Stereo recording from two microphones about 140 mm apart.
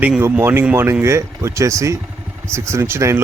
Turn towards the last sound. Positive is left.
turn(degrees=-20)  # may be behind; listen again after turning